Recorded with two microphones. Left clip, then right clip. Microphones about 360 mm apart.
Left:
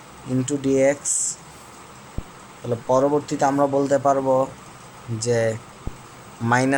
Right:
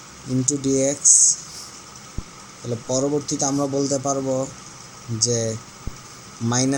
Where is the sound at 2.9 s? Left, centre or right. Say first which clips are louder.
Left 4 dB; left.